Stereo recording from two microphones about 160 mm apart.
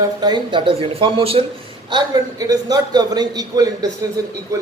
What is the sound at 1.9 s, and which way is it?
A man's voice, 25° right (ahead or behind).